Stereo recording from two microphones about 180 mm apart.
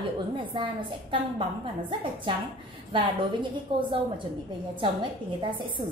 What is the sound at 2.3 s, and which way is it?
A woman's voice, 25° right (ahead or behind).